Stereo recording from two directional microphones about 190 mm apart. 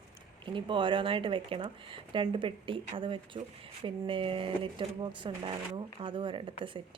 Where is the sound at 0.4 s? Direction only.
25° right (ahead or behind).